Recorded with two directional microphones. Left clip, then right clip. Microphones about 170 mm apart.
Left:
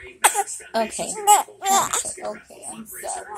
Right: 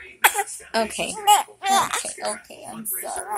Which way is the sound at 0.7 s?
35° right (ahead or behind).